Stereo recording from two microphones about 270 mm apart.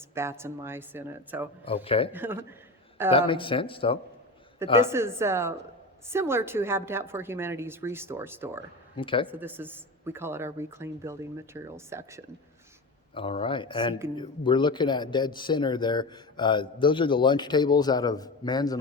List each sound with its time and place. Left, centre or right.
0.1 s speech: centre
1.6 s speech: left
2.1 s speech: centre
3.1 s speech: centre
4.9 s speech: centre
9.0 s speech: centre
9.2 s speech: centre
13.1 s speech: centre